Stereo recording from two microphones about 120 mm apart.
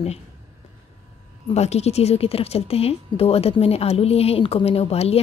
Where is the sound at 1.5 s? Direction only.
65° left (ahead or behind).